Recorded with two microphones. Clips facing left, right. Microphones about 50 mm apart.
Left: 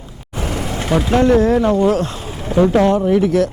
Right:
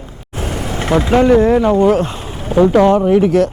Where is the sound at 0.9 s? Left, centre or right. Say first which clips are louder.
Right 3 dB; centre.